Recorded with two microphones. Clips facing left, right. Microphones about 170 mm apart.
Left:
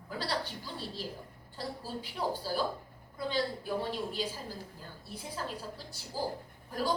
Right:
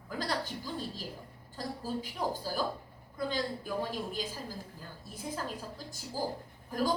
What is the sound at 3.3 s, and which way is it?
Speech, 45° right (ahead or behind).